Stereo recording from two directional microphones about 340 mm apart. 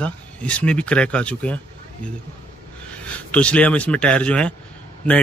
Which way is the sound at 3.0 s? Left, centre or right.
Centre.